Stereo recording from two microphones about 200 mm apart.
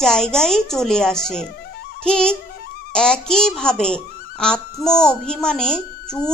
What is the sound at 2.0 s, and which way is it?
Music, 5° left (ahead or behind).